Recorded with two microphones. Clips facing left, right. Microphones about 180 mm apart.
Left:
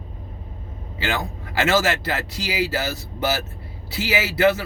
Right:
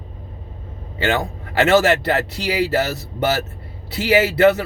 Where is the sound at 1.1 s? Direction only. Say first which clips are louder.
Right 5 dB; 65° right (ahead or behind).